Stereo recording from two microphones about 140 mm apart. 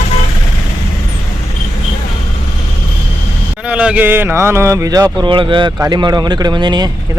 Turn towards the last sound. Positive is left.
turn(degrees=-30)  # may be behind; listen again after turning